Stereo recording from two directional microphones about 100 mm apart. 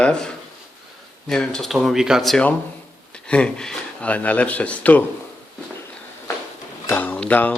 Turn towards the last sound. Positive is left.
turn(degrees=15)  # may be behind; listen again after turning